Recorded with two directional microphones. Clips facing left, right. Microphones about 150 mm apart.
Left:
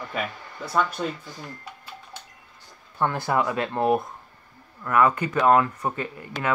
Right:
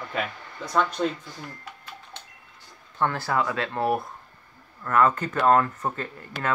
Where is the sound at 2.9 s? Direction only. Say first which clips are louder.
Left 1 dB; 15° left (ahead or behind).